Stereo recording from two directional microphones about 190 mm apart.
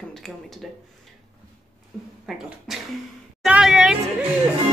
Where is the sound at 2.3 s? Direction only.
Centre (ahead or behind).